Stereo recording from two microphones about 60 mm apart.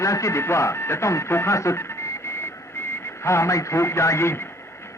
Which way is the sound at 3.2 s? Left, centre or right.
Left.